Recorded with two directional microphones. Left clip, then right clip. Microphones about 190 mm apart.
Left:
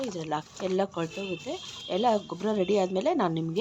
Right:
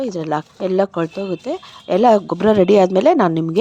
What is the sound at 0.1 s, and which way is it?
Speech, 40° right (ahead or behind).